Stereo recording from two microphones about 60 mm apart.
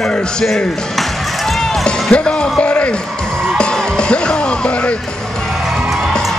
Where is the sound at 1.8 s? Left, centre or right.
Centre.